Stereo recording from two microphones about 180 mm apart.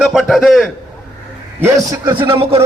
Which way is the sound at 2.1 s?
30° right (ahead or behind).